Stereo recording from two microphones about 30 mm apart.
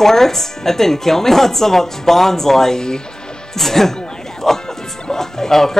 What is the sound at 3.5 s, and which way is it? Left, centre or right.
Speech, centre.